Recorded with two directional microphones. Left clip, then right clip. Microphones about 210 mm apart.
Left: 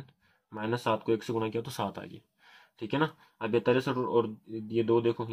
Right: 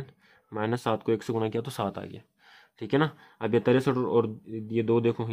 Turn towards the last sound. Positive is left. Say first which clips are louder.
# right 1 dB
turn(degrees=-55)  # may be behind; listen again after turning